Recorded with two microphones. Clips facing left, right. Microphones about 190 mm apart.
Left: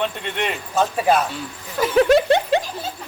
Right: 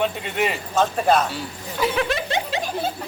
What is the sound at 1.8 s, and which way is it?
Speech, 50° left (ahead or behind).